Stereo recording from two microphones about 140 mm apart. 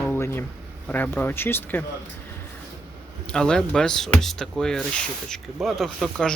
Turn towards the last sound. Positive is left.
turn(degrees=0)  # may be behind; listen again after turning